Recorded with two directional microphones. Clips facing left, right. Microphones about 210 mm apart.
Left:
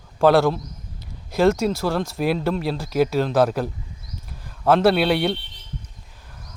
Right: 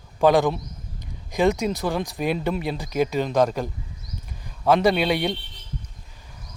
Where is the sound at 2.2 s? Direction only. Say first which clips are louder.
Left 3 dB; centre (ahead or behind).